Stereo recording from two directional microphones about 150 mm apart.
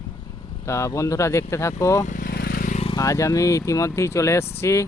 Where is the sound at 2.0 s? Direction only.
60° left (ahead or behind).